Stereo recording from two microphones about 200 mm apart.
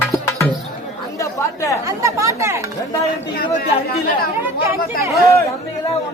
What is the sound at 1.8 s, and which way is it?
Chatter, 15° right (ahead or behind).